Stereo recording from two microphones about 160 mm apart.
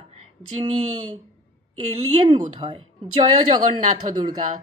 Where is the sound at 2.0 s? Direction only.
35° right (ahead or behind).